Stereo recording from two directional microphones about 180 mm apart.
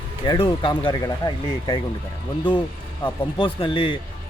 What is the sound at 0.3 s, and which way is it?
Speech, 25° left (ahead or behind).